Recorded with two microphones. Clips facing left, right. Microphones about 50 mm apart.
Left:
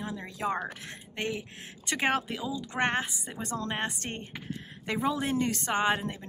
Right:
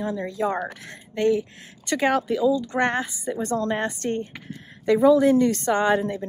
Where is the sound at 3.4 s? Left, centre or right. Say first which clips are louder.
Right 9 dB; right.